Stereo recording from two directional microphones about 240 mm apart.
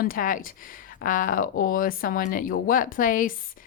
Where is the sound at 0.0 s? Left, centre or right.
Left.